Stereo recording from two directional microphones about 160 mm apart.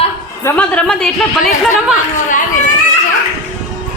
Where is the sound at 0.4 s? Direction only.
10° left (ahead or behind).